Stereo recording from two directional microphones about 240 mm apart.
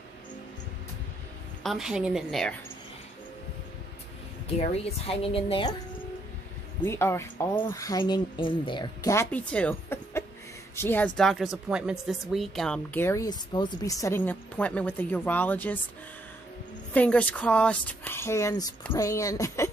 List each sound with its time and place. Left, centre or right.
1.6 s a woman's voice: centre
4.6 s a woman's voice: left
6.8 s speech: centre
16.9 s speech: centre